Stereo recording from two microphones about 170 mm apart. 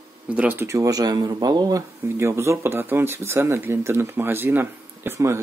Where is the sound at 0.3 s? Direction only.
10° right (ahead or behind).